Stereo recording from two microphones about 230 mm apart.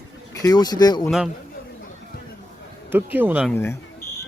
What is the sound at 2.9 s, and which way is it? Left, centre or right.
Speech, centre.